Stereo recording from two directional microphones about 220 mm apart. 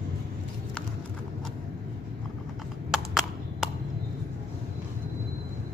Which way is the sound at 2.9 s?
Centre (ahead or behind).